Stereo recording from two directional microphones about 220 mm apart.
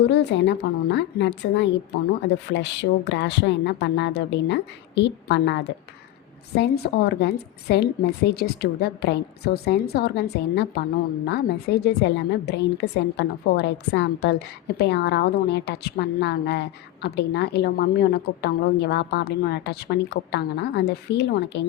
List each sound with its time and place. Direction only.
0.1 s a woman's voice: 55° left (ahead or behind)